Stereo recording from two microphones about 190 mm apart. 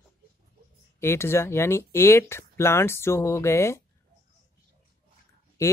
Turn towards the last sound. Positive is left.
turn(degrees=15)  # may be behind; listen again after turning